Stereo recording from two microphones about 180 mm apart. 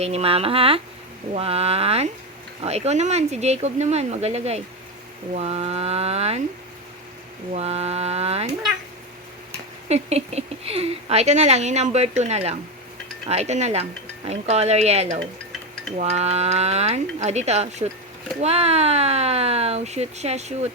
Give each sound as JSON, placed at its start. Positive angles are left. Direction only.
{"t": 0.0, "sound": "speech", "side_deg": -35}
{"t": 7.5, "sound": "speech", "side_deg": -35}
{"t": 9.9, "sound": "speech", "side_deg": -35}